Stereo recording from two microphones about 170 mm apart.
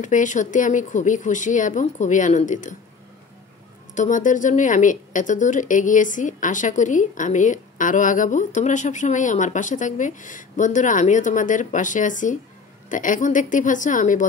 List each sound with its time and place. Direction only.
0.0 s speech: 50° left (ahead or behind)
3.9 s speech: 50° left (ahead or behind)